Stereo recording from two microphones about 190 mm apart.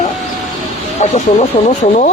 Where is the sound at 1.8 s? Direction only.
40° left (ahead or behind).